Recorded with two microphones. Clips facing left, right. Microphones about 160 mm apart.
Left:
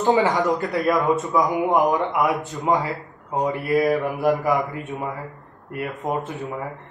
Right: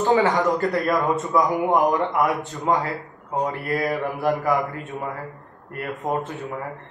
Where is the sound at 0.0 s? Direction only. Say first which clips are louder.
Even; 20° left (ahead or behind).